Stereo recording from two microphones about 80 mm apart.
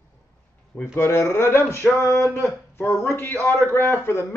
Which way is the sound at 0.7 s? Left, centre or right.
Left.